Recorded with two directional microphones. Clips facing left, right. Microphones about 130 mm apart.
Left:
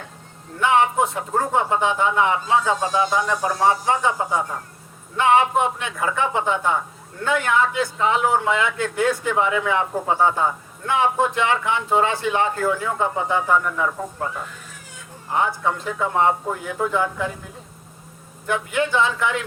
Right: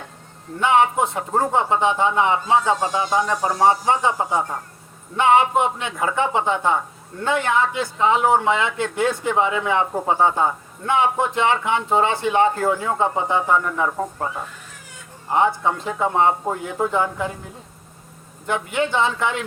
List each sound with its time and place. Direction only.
0.6 s speech: 20° right (ahead or behind)
15.3 s speech: 25° right (ahead or behind)
18.4 s speech: 20° right (ahead or behind)